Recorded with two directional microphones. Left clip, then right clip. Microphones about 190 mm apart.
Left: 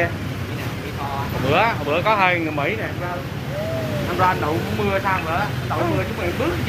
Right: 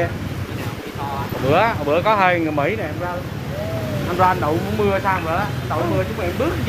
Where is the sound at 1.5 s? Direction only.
55° right (ahead or behind).